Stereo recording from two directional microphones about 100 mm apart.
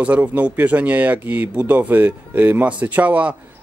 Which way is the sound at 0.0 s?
15° right (ahead or behind).